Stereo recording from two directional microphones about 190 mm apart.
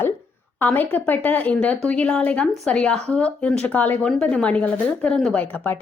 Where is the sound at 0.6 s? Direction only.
10° left (ahead or behind).